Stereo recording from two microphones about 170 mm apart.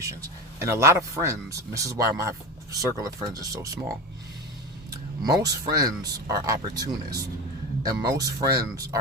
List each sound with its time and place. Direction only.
0.0 s speech: 20° right (ahead or behind)
4.9 s speech: 20° right (ahead or behind)